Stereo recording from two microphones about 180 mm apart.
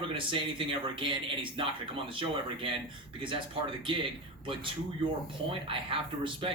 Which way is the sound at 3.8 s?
30° right (ahead or behind).